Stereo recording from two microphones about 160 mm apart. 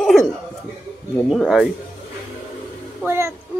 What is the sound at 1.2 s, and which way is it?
Speech, centre (ahead or behind).